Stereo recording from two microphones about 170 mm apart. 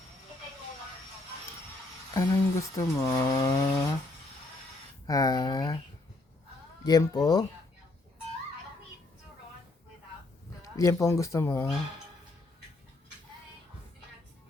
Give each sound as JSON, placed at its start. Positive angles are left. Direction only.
{"t": 2.1, "sound": "speech", "side_deg": 20}
{"t": 5.0, "sound": "speech", "side_deg": 20}
{"t": 6.8, "sound": "speech", "side_deg": 25}
{"t": 10.6, "sound": "speech", "side_deg": 15}